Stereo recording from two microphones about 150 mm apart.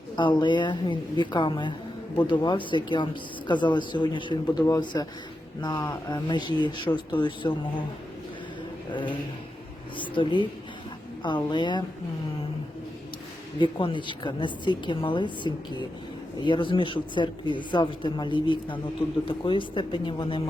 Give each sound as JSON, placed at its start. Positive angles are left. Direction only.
{"t": 0.2, "sound": "speech", "side_deg": 30}
{"t": 8.9, "sound": "speech", "side_deg": 30}
{"t": 13.6, "sound": "speech", "side_deg": 35}